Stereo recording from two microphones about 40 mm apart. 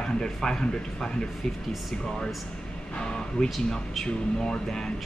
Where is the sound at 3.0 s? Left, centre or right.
Centre.